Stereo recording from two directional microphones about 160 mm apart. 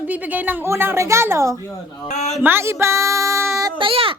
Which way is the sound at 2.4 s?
15° right (ahead or behind).